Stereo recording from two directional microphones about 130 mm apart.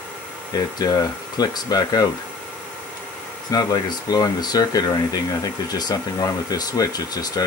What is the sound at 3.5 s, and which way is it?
Speech, 30° left (ahead or behind).